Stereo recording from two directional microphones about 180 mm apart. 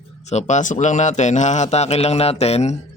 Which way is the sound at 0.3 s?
40° left (ahead or behind).